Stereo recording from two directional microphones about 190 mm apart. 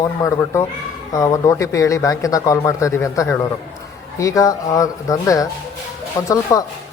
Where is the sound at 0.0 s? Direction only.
15° left (ahead or behind).